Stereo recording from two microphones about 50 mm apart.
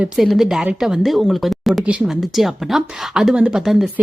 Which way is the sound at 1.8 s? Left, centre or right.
Right.